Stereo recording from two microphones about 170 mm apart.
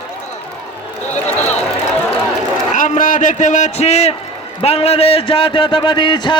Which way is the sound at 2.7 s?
50° left (ahead or behind).